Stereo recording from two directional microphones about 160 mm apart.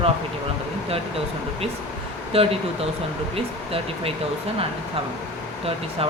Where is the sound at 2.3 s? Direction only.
35° right (ahead or behind).